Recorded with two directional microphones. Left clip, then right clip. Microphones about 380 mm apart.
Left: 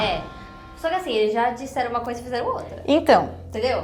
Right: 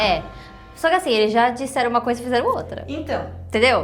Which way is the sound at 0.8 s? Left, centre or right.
Right.